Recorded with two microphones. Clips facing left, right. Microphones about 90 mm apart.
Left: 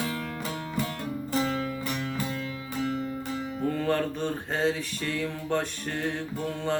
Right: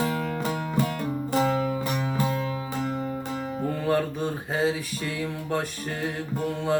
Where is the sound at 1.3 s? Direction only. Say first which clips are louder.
Right 4 dB; 45° right (ahead or behind).